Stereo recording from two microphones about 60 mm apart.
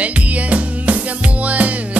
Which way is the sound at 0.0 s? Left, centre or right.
Right.